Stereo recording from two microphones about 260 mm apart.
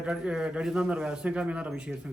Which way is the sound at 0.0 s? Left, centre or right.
Centre.